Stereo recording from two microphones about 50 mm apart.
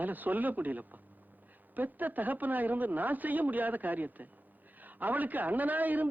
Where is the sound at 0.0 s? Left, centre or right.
Right.